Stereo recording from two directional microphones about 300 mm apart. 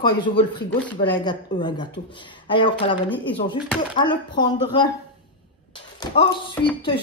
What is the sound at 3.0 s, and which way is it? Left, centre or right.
Speech, centre.